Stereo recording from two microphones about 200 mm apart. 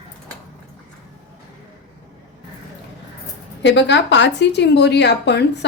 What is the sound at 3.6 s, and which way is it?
A woman's voice, 65° left (ahead or behind).